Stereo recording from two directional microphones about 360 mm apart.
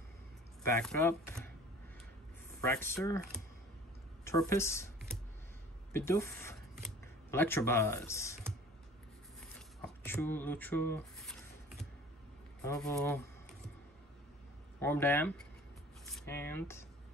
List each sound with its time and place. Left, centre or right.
0.7 s speech: centre
2.6 s speech: centre
4.2 s a woman's voice: centre
5.9 s speech: centre
9.4 s a sound: centre
12.6 s speech: centre
14.8 s speech: centre